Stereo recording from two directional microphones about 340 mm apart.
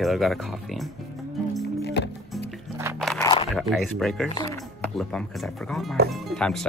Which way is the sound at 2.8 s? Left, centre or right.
Centre.